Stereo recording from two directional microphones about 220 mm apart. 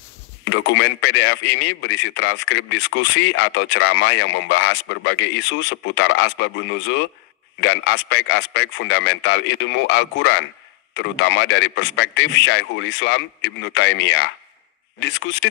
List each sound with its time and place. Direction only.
0.5 s a man's voice: 55° left (ahead or behind)